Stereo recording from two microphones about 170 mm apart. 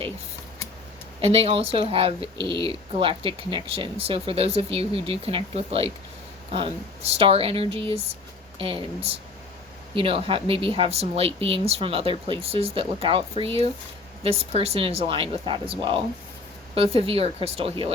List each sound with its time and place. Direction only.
1.2 s speech: 35° right (ahead or behind)
14.3 s speech: 35° right (ahead or behind)